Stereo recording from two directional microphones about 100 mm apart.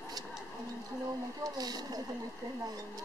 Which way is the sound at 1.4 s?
40° right (ahead or behind).